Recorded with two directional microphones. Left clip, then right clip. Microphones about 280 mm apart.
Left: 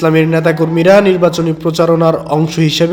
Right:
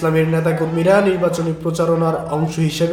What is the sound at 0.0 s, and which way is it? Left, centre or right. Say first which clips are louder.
A man's voice: left 6 dB; left.